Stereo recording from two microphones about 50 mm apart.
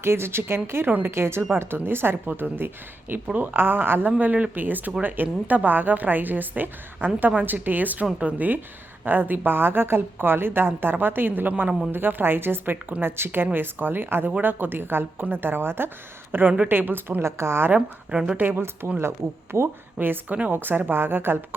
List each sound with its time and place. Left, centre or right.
0.0 s a woman's voice: right
4.2 s a woman's voice: right
17.2 s speech: right
17.7 s speech: centre
18.5 s a woman's voice: right
20.0 s a woman's voice: right
20.5 s a woman's voice: right